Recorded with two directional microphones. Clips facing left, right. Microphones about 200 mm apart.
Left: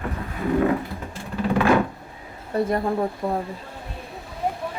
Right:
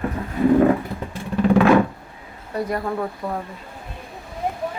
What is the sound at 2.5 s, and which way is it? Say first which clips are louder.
Speech: left 2 dB; 25° left (ahead or behind).